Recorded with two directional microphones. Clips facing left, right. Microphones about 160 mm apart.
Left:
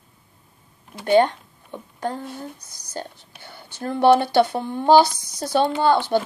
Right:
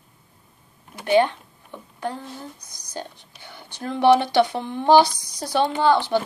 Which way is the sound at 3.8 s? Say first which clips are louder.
Left 1 dB; 50° left (ahead or behind).